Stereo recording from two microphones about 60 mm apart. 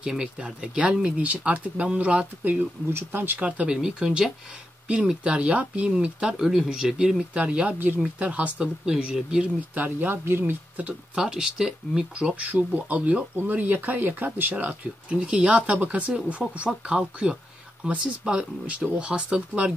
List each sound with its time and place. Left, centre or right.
0.0 s speech: centre
2.9 s speech: right
3.3 s speech: right
8.8 s speech: centre
9.8 s speech: right
11.1 s speech: centre
12.4 s speech: right